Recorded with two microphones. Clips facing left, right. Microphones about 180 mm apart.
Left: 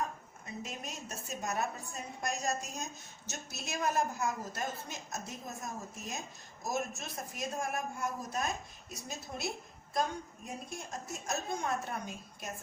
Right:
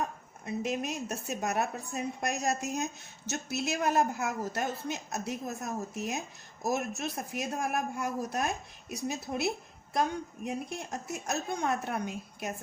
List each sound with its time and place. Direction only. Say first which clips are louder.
0.6 s speech: right 11 dB; 75° right (ahead or behind)